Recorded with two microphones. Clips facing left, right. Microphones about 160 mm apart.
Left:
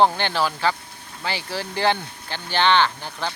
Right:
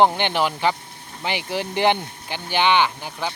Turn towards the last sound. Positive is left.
turn(degrees=-15)  # may be behind; listen again after turning